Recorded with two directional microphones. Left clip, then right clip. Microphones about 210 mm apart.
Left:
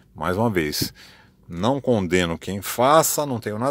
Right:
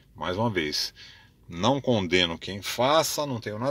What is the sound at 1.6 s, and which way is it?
Speech, 25° left (ahead or behind).